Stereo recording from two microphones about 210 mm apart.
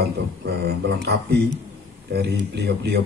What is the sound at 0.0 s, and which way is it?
Speech, 50° right (ahead or behind).